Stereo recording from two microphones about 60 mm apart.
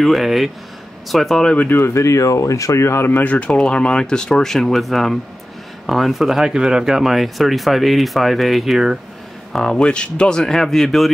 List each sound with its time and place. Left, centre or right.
0.0 s speech: centre
2.0 s speech: left
3.1 s speech: left
3.3 s speech: centre
9.5 s speech: centre